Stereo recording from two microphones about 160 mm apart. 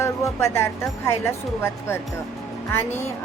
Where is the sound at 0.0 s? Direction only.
15° left (ahead or behind).